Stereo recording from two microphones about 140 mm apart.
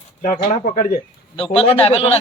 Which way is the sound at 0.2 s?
65° left (ahead or behind).